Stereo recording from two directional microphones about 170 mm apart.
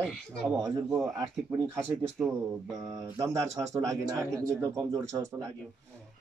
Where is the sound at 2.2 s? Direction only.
5° right (ahead or behind).